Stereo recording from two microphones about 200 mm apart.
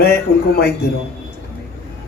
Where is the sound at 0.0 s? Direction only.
50° left (ahead or behind).